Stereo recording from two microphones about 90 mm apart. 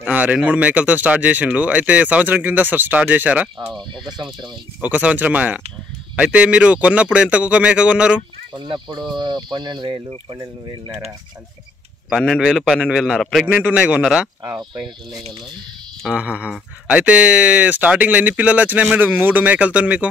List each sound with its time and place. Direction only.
0.0 s speech: 15° right (ahead or behind)
4.0 s speech: 60° right (ahead or behind)
4.8 s speech: 15° right (ahead or behind)
8.5 s speech: 60° right (ahead or behind)
12.1 s a man's voice: centre (ahead or behind)
13.6 s speech: 15° right (ahead or behind)
16.2 s speech: 15° right (ahead or behind)